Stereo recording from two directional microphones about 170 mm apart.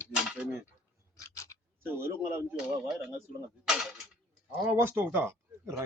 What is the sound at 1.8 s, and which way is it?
Speech, 15° right (ahead or behind).